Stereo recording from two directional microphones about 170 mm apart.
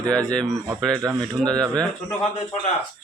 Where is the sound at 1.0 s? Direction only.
20° right (ahead or behind).